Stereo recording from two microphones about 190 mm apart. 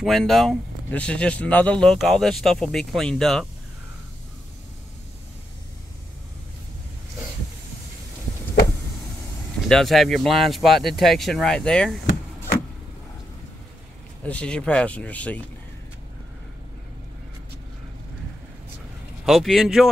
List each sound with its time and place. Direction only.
0.0 s speech: centre (ahead or behind)
9.7 s speech: centre (ahead or behind)
14.2 s speech: 5° left (ahead or behind)
19.2 s speech: centre (ahead or behind)